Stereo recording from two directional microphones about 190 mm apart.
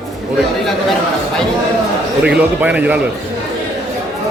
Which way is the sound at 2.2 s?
5° right (ahead or behind).